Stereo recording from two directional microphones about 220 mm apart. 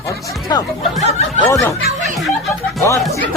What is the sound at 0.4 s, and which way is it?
Speech, 20° left (ahead or behind).